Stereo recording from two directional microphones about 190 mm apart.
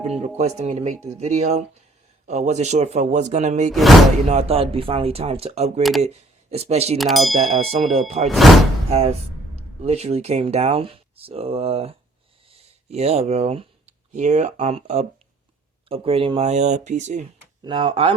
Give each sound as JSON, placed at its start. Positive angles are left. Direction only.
{"t": 0.2, "sound": "speech", "side_deg": -35}
{"t": 3.7, "sound": "speech", "side_deg": 0}
{"t": 4.3, "sound": "speech", "side_deg": -35}
{"t": 7.0, "sound": "speech", "side_deg": 0}
{"t": 7.5, "sound": "speech", "side_deg": -35}
{"t": 17.6, "sound": "speech", "side_deg": -25}